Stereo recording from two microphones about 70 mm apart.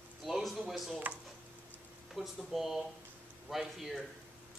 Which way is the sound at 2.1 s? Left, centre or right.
Centre.